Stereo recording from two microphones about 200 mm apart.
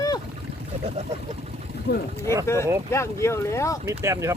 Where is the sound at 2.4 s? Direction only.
15° left (ahead or behind).